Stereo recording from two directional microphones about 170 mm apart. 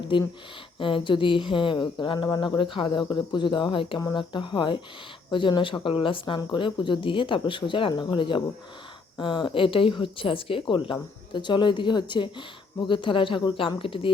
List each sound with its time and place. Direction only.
0.1 s speech: 30° left (ahead or behind)